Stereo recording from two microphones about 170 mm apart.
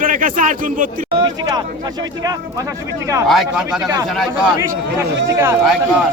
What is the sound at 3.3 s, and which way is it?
Speech, centre (ahead or behind).